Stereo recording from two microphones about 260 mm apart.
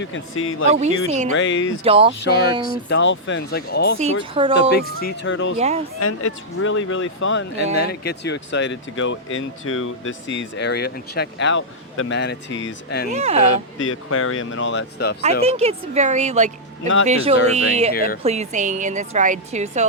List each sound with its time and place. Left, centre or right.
0.0 s speech: left
0.7 s speech: right
1.3 s speech: left
1.8 s speech: right
2.2 s speech: left
4.0 s speech: centre
4.7 s speech: left
5.5 s speech: right
6.0 s speech: left
13.1 s speech: right
13.7 s speech: left
15.2 s speech: right
17.9 s speech: left
18.2 s speech: right